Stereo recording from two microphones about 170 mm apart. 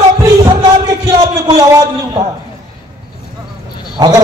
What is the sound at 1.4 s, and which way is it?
Speech, 25° right (ahead or behind).